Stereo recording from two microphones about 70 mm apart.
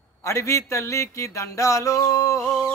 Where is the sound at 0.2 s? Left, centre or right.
Left.